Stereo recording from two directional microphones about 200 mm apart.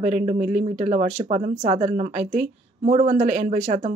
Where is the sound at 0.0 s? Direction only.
30° right (ahead or behind).